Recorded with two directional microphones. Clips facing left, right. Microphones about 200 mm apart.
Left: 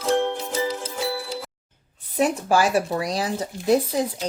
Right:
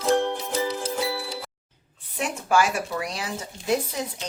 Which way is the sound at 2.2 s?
35° left (ahead or behind).